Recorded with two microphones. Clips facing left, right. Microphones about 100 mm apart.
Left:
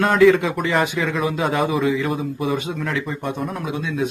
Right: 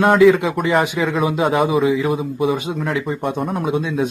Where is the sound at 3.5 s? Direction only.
30° right (ahead or behind).